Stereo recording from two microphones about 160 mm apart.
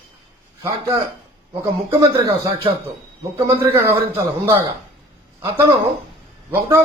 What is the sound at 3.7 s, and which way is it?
Speech, 15° right (ahead or behind).